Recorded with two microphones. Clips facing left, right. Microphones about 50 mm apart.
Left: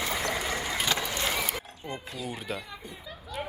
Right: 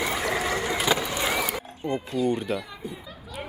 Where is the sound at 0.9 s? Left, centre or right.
Centre.